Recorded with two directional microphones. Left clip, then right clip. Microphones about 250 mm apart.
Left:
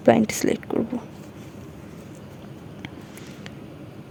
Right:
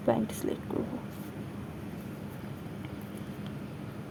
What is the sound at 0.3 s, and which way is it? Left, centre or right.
Speech, left.